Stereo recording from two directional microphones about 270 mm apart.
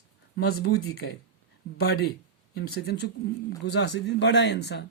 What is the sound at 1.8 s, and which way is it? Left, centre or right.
Speech, left.